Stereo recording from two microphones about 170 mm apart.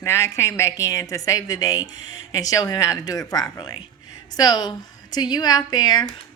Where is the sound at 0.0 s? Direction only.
15° left (ahead or behind).